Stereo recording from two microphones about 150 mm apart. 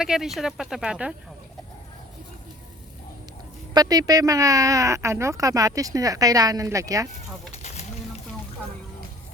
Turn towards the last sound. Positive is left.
turn(degrees=50)  # may be behind; listen again after turning